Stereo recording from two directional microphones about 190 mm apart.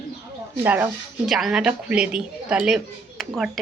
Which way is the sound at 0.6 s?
10° right (ahead or behind).